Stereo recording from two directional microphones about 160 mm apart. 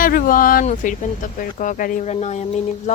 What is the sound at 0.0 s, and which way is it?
Speech, 60° left (ahead or behind).